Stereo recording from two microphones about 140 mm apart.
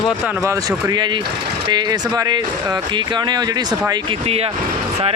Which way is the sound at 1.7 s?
30° right (ahead or behind).